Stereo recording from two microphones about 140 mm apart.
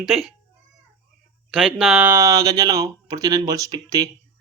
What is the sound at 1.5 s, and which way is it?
Speech, centre (ahead or behind).